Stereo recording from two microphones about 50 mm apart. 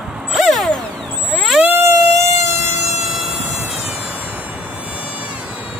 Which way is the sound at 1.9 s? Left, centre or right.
Right.